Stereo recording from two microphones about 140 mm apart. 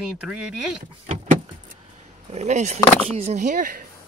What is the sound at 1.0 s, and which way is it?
Vehicle, 55° right (ahead or behind).